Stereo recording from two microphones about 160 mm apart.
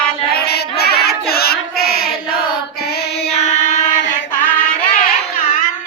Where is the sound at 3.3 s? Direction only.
45° left (ahead or behind).